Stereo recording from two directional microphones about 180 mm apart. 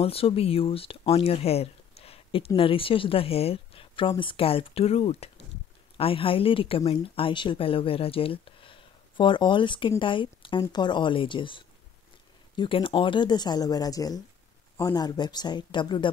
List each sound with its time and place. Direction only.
0.0 s a woman's voice: 30° left (ahead or behind)